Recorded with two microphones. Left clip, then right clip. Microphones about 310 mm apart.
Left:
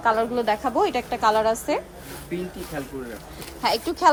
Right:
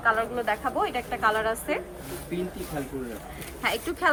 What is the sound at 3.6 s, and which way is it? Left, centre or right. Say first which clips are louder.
Speech: left 6 dB; centre.